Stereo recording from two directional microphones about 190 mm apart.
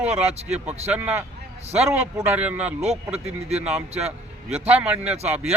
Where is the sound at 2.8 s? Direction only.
35° right (ahead or behind).